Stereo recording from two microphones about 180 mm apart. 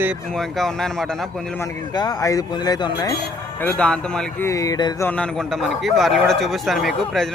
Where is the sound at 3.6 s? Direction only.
5° left (ahead or behind).